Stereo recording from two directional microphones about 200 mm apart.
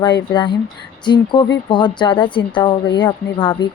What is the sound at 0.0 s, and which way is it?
Speech, 20° left (ahead or behind).